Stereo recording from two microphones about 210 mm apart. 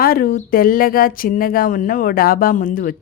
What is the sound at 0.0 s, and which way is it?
Speech, 45° left (ahead or behind).